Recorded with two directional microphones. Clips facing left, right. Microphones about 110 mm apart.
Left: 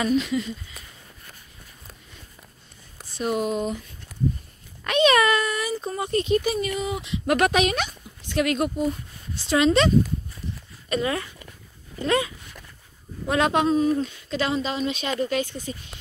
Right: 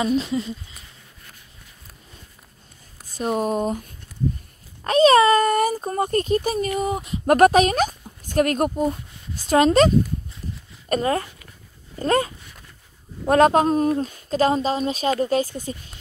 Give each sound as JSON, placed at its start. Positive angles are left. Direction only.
{"t": 0.1, "sound": "a woman's voice", "side_deg": -35}
{"t": 3.2, "sound": "speech", "side_deg": -40}
{"t": 4.8, "sound": "a woman's voice", "side_deg": -35}
{"t": 5.4, "sound": "a woman's voice", "side_deg": -50}